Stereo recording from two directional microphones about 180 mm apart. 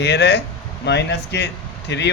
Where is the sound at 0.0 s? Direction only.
70° left (ahead or behind).